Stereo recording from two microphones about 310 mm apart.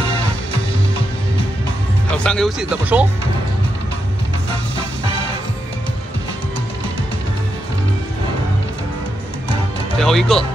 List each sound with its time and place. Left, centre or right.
2.0 s speech: centre
9.9 s speech: centre